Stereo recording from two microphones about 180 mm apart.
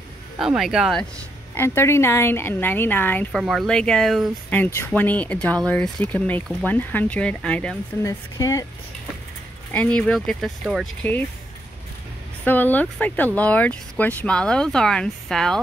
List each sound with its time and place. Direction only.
0.4 s speech: 5° right (ahead or behind)
1.5 s speech: 15° left (ahead or behind)
4.6 s speech: 10° left (ahead or behind)
8.0 s speech: 15° left (ahead or behind)
9.7 s speech: 10° left (ahead or behind)
12.4 s speech: 10° left (ahead or behind)